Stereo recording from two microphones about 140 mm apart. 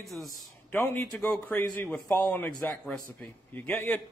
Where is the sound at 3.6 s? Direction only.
15° left (ahead or behind).